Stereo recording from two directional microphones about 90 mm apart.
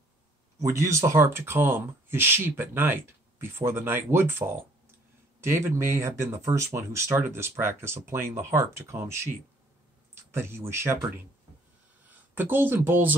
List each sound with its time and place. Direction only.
0.6 s speech: 35° right (ahead or behind)
10.3 s speech: 25° right (ahead or behind)
12.4 s speech: 25° right (ahead or behind)